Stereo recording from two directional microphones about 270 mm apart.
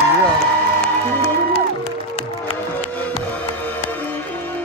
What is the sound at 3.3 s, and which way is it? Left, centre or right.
Music, centre.